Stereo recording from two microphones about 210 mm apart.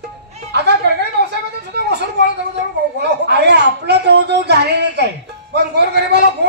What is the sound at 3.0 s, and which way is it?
A man's voice, 55° right (ahead or behind).